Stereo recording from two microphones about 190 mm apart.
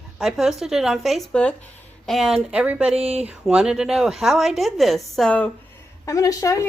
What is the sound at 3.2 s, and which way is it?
A woman's voice, 5° right (ahead or behind).